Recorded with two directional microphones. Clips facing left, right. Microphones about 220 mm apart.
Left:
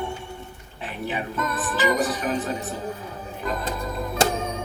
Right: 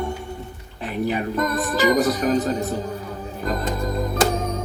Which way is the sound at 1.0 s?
40° right (ahead or behind).